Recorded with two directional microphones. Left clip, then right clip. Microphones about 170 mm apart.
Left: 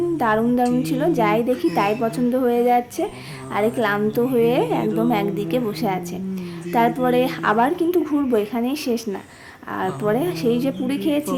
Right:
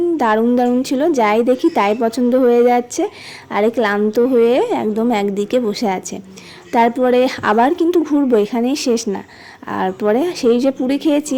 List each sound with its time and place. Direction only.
0.2 s a woman's voice: 35° right (ahead or behind)